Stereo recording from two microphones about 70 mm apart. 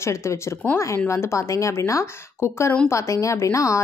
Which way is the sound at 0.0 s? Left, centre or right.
Left.